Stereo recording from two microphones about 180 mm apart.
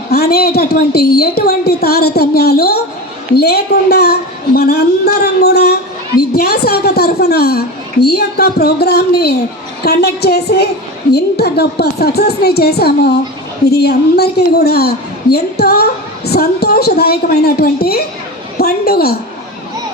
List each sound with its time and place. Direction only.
0.1 s a woman's voice: 60° left (ahead or behind)